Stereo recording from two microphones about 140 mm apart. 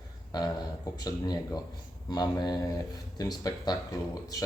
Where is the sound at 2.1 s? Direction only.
30° left (ahead or behind).